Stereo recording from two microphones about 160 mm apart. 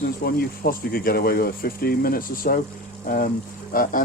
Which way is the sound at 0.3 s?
70° left (ahead or behind).